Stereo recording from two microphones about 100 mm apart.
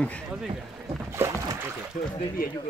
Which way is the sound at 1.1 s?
30° right (ahead or behind).